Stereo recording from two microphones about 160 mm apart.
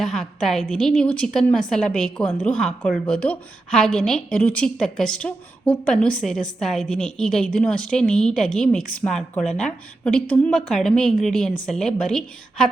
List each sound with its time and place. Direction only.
0.0 s a woman's voice: centre (ahead or behind)